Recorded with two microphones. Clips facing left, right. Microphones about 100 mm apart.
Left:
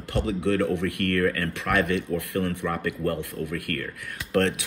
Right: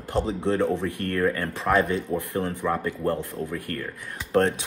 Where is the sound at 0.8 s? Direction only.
90° left.